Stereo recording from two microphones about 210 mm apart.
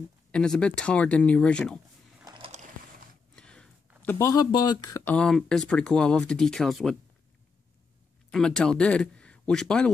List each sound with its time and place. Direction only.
0.3 s speech: 5° left (ahead or behind)
2.2 s a sound: 25° right (ahead or behind)
3.3 s speech: 5° left (ahead or behind)
8.3 s speech: 5° left (ahead or behind)